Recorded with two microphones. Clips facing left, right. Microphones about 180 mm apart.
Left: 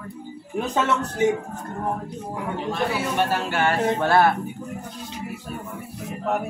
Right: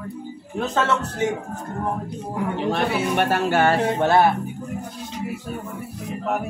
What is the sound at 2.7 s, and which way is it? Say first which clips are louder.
Speech: right 2 dB; 65° right (ahead or behind).